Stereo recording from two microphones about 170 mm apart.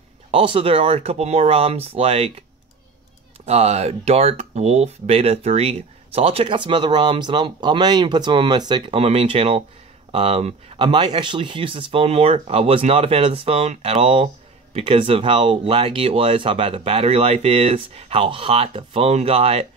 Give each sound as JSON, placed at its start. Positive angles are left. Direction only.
{"t": 0.3, "sound": "speech", "side_deg": -30}
{"t": 3.4, "sound": "speech", "side_deg": -40}